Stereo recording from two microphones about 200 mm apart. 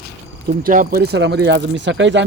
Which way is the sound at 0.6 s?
45° right (ahead or behind).